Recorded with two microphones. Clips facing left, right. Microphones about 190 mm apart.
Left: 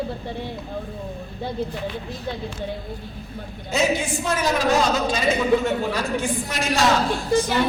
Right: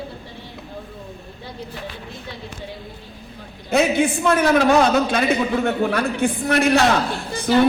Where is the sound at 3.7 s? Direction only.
60° right (ahead or behind).